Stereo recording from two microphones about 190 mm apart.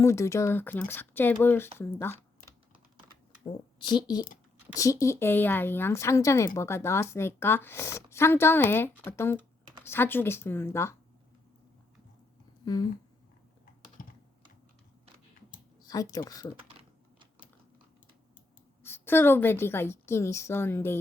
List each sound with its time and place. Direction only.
0.0 s speech: 15° left (ahead or behind)
3.4 s a woman's voice: 25° left (ahead or behind)
12.7 s speech: 20° left (ahead or behind)
14.0 s computer keyboard: 50° left (ahead or behind)
15.8 s a sound: 20° left (ahead or behind)
16.1 s speech: 20° left (ahead or behind)
18.8 s speech: 10° left (ahead or behind)